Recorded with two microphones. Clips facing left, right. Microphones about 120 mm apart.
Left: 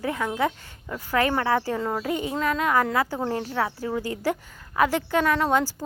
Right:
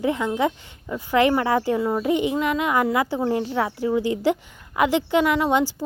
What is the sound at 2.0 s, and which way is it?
A woman's voice, 20° right (ahead or behind).